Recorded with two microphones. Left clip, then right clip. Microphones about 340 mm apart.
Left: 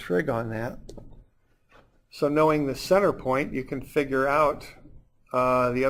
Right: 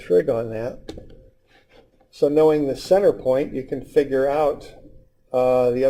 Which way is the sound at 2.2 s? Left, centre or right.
Left.